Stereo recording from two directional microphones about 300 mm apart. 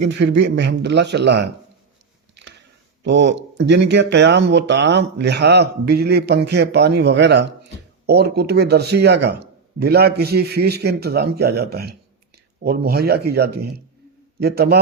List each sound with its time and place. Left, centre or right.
0.0 s speech: right
3.0 s speech: right